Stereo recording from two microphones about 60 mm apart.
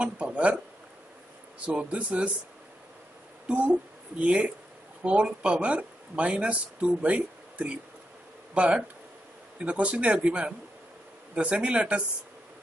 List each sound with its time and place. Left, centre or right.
0.0 s speech: right
1.7 s speech: right
3.4 s speech: centre